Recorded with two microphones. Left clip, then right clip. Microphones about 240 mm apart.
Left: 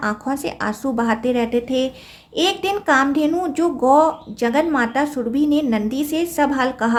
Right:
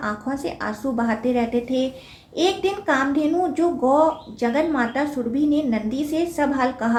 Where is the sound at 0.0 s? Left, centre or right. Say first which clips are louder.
Left 4 dB; left.